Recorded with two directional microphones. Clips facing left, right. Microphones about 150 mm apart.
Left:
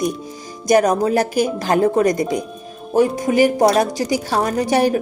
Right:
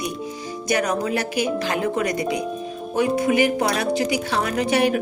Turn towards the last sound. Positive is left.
turn(degrees=35)  # may be behind; listen again after turning